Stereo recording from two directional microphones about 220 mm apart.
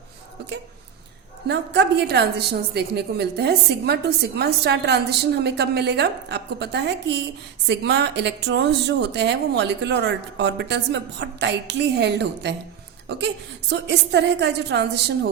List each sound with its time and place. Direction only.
1.5 s a woman's voice: 50° right (ahead or behind)